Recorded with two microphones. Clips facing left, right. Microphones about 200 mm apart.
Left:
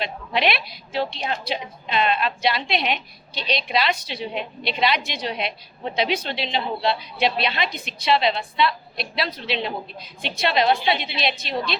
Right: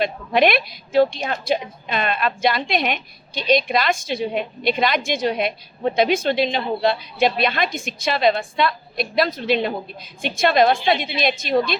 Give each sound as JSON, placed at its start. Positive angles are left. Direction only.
{"t": 0.0, "sound": "a woman's voice", "side_deg": -50}